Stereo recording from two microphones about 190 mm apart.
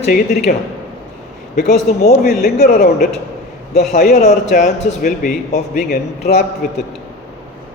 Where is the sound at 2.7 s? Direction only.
55° left (ahead or behind).